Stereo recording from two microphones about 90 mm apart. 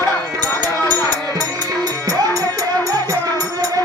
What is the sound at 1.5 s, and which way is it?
Music, 45° right (ahead or behind).